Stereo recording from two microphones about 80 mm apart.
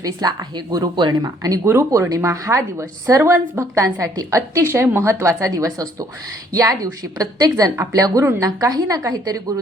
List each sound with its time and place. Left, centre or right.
0.0 s a woman's voice: right
1.6 s a woman's voice: right